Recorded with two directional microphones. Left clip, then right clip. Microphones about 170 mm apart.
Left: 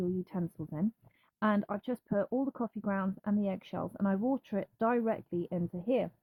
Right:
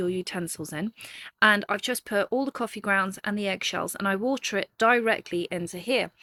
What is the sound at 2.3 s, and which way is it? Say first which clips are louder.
Speech: right 7 dB; 20° right (ahead or behind).